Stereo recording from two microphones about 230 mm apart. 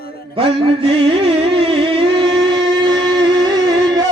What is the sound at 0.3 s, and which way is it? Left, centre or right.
Music, right.